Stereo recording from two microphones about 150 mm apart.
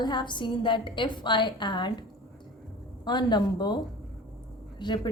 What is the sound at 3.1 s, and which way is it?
Speech, 30° left (ahead or behind).